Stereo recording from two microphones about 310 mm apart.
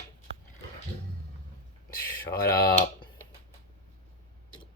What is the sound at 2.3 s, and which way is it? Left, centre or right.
Speech, left.